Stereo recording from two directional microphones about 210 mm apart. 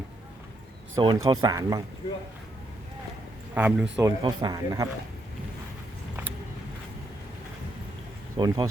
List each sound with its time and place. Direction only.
0.9 s speech: 15° right (ahead or behind)
3.5 s speech: 5° right (ahead or behind)
4.2 s a man's voice: 20° right (ahead or behind)
8.4 s a man's voice: 20° right (ahead or behind)